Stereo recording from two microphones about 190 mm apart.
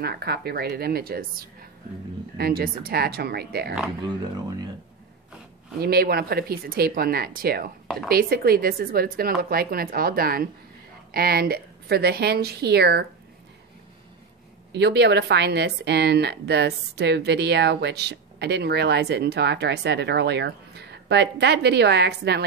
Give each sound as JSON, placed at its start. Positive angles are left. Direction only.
{"t": 0.0, "sound": "speech", "side_deg": -55}
{"t": 4.5, "sound": "speech", "side_deg": -20}
{"t": 5.8, "sound": "speech", "side_deg": -55}
{"t": 14.7, "sound": "speech", "side_deg": -60}